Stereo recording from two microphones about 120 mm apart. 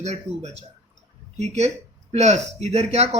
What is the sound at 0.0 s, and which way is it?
Speech, 70° right (ahead or behind).